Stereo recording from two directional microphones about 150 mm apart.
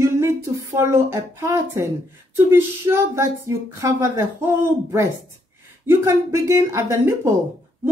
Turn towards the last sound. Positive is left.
turn(degrees=-20)  # may be behind; listen again after turning